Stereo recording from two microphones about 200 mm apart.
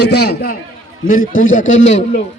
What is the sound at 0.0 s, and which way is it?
Speech, 55° left (ahead or behind).